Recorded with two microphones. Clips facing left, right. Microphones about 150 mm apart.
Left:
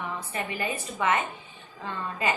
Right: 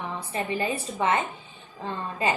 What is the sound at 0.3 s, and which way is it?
A woman's voice, 30° right (ahead or behind).